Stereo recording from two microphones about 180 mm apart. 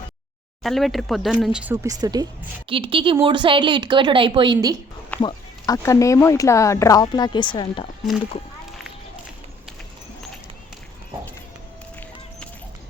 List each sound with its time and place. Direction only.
0.6 s speech: centre (ahead or behind); by 4.8 s 25° right (ahead or behind)
5.2 s speech: 20° left (ahead or behind)